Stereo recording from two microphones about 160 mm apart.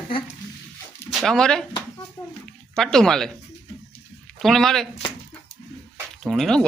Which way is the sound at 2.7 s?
5° left (ahead or behind).